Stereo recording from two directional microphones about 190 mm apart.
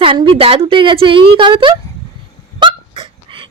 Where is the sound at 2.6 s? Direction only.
25° right (ahead or behind).